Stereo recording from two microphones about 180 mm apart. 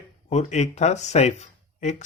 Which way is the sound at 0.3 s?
40° left (ahead or behind).